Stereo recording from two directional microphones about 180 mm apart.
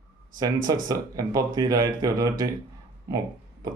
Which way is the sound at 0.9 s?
20° right (ahead or behind).